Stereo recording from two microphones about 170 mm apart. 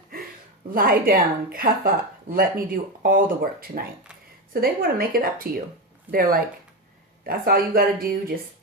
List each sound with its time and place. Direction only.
0.7 s speech: 60° right (ahead or behind)